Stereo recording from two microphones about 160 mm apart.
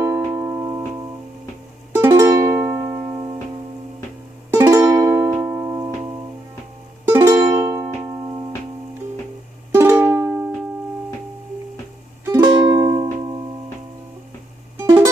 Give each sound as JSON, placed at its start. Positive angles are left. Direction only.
{"t": 0.0, "sound": "music", "side_deg": -20}
{"t": 2.0, "sound": "music", "side_deg": -15}
{"t": 4.5, "sound": "music", "side_deg": -15}
{"t": 7.1, "sound": "music", "side_deg": -15}
{"t": 9.7, "sound": "music", "side_deg": -15}
{"t": 12.4, "sound": "music", "side_deg": -25}
{"t": 14.8, "sound": "music", "side_deg": -15}